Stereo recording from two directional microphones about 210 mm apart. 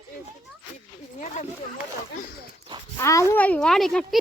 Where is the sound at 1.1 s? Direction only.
35° left (ahead or behind).